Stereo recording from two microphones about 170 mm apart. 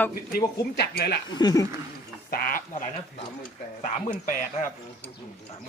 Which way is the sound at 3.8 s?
50° left (ahead or behind).